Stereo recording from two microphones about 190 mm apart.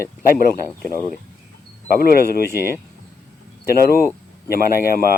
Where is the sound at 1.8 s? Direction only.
50° left (ahead or behind).